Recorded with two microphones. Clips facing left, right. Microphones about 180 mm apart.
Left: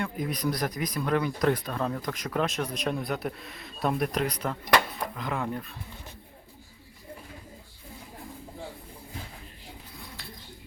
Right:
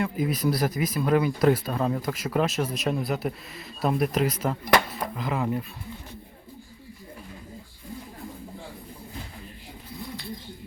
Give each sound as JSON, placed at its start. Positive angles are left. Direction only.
{"t": 0.0, "sound": "speech", "side_deg": -5}